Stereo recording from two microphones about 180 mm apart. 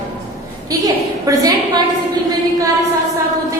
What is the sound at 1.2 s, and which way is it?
Speech, 20° right (ahead or behind).